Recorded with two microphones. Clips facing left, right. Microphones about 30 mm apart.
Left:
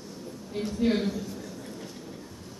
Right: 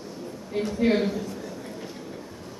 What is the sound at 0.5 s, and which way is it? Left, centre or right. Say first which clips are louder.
A woman's voice: right 4 dB; centre.